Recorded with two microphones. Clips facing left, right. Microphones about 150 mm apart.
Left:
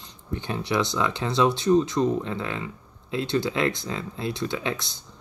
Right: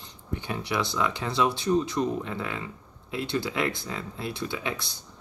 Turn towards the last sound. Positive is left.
turn(degrees=25)  # may be behind; listen again after turning